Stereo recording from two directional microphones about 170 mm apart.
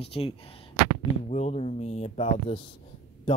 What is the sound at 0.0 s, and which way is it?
Speech, 35° left (ahead or behind).